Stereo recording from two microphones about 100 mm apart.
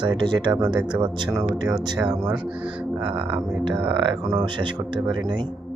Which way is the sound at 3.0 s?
60° right (ahead or behind).